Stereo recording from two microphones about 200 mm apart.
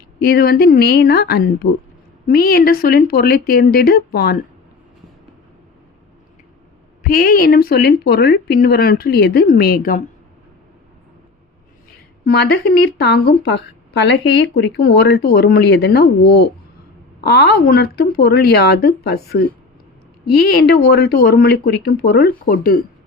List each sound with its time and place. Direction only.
0.2 s speech: 50° left (ahead or behind)
7.0 s speech: 45° left (ahead or behind)
12.2 s speech: 50° left (ahead or behind)
20.7 s speech: 55° left (ahead or behind)